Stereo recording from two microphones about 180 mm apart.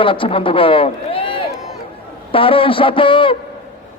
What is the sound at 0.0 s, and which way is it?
A man's voice, 30° left (ahead or behind).